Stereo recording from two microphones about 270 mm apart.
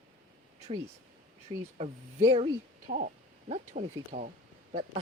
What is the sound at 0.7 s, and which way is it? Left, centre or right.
Speech, right.